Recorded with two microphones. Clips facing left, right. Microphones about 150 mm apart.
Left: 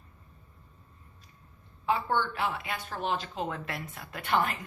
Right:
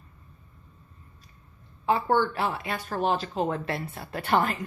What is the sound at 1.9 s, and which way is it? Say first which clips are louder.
A woman's voice: right 5 dB; 40° right (ahead or behind).